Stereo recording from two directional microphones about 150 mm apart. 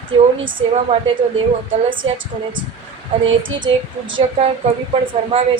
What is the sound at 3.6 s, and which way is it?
Speech, 35° right (ahead or behind).